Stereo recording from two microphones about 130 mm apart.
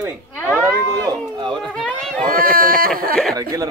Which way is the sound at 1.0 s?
35° right (ahead or behind).